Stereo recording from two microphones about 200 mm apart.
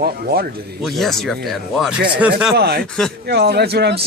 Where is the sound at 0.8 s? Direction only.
Centre (ahead or behind).